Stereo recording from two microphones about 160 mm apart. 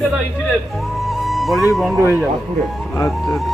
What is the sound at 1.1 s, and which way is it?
Music, centre (ahead or behind).